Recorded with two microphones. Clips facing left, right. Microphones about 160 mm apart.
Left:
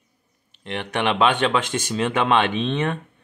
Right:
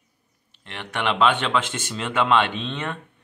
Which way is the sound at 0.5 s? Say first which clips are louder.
Left 5 dB; 15° left (ahead or behind).